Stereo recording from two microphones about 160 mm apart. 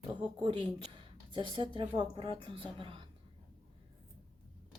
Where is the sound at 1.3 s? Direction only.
30° right (ahead or behind).